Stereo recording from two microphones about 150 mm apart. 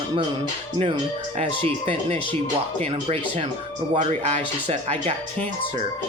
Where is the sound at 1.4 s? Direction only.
40° right (ahead or behind).